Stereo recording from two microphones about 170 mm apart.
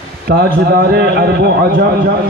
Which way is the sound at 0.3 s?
70° right (ahead or behind).